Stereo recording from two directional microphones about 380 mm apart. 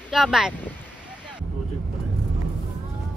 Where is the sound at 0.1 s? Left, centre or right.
Centre.